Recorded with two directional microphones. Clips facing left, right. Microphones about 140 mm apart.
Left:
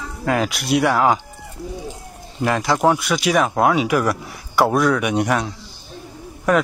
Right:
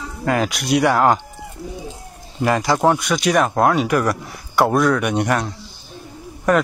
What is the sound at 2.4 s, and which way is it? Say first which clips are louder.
Speech: right 1 dB; centre (ahead or behind).